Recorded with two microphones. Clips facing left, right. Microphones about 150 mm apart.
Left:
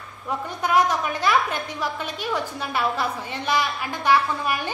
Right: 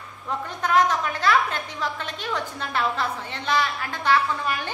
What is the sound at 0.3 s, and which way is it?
A woman's voice, 10° left (ahead or behind).